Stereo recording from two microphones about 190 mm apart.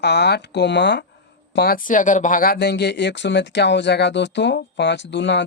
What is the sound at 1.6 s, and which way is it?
Speech, 50° left (ahead or behind).